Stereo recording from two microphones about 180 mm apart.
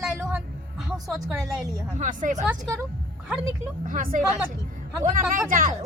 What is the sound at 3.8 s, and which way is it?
A woman's voice, 50° right (ahead or behind).